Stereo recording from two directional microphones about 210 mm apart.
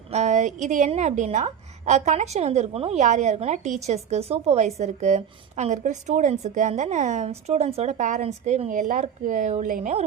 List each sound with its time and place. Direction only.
0.1 s a woman's voice: 35° right (ahead or behind)